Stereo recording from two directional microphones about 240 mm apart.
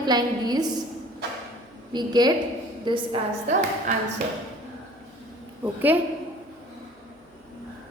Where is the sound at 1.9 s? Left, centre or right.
Centre.